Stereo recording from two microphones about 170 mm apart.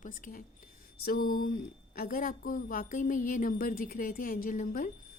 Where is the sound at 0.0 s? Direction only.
50° left (ahead or behind).